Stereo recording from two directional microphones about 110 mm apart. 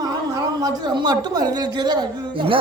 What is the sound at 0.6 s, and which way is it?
Speech, 40° right (ahead or behind).